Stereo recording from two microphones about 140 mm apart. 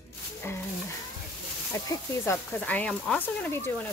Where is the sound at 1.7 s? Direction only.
20° left (ahead or behind).